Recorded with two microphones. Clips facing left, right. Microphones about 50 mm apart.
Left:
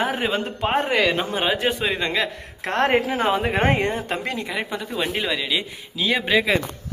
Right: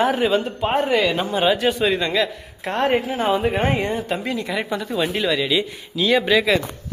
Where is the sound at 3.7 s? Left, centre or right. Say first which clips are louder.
Right 1 dB; left.